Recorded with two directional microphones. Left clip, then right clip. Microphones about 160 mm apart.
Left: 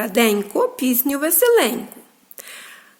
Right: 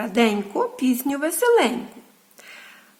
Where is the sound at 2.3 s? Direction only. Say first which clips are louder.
Left 5 dB; 20° left (ahead or behind).